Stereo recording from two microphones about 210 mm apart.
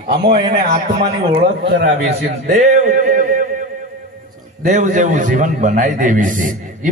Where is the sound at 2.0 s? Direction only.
30° right (ahead or behind).